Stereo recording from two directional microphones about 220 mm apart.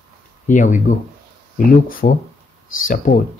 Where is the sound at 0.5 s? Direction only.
35° left (ahead or behind).